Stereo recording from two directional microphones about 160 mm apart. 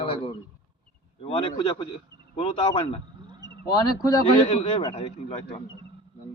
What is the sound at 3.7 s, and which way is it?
Speech, 25° left (ahead or behind).